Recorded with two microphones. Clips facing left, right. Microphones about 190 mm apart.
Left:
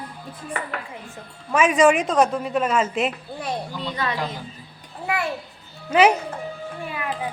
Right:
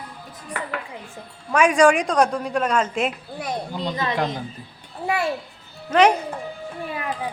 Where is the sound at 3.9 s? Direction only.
25° right (ahead or behind).